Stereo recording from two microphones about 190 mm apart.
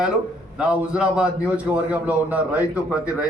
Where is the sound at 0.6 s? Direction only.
5° right (ahead or behind).